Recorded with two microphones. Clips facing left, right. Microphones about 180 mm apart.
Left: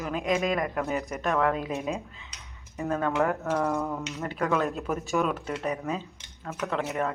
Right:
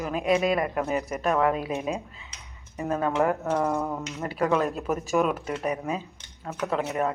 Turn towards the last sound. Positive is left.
turn(degrees=-10)  # may be behind; listen again after turning